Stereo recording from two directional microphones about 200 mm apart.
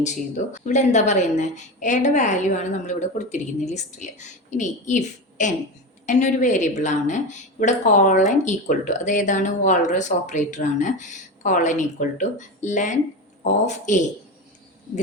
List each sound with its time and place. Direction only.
0.0 s a woman's voice: 35° left (ahead or behind)